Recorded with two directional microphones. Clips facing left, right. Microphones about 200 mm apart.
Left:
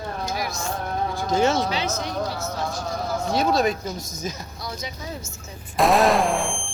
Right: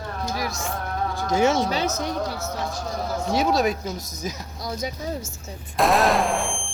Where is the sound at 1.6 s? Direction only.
45° right (ahead or behind).